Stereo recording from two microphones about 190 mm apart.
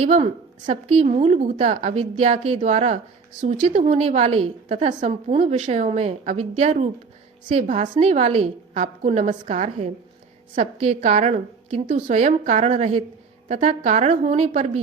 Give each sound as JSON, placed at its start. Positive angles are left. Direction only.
{"t": 0.0, "sound": "a woman's voice", "side_deg": -35}